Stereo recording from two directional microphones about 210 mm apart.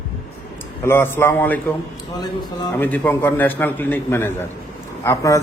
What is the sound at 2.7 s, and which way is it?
A man's voice, 10° left (ahead or behind).